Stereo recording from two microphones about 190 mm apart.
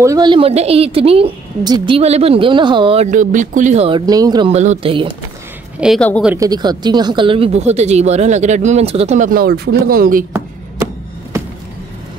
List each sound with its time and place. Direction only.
0.0 s a woman's voice: 20° right (ahead or behind)
3.1 s speech: 45° right (ahead or behind)
4.0 s a woman's voice: 20° right (ahead or behind)
4.5 s speech: 35° right (ahead or behind)
5.8 s speech: centre (ahead or behind)
6.2 s speech: 15° right (ahead or behind); by 10.2 s 50° right (ahead or behind)